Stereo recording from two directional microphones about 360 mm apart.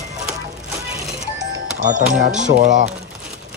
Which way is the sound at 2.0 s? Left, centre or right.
Centre.